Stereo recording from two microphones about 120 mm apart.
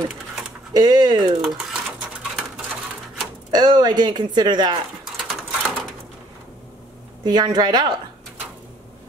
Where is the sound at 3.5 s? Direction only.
35° right (ahead or behind).